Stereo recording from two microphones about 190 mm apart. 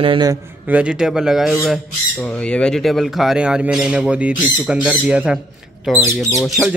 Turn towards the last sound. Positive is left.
turn(degrees=0)  # may be behind; listen again after turning